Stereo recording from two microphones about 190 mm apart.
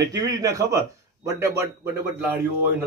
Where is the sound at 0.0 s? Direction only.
20° right (ahead or behind).